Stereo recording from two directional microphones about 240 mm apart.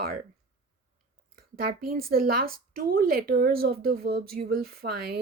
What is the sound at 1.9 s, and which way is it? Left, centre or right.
Speech, right.